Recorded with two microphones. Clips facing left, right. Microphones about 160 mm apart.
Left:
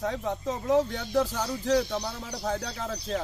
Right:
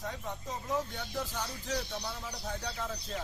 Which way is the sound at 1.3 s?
75° left (ahead or behind).